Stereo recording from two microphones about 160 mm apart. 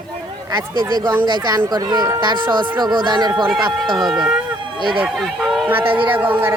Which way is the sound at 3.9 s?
Centre (ahead or behind).